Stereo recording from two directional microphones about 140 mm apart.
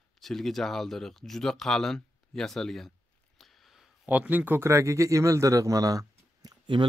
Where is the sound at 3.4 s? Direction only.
Centre (ahead or behind).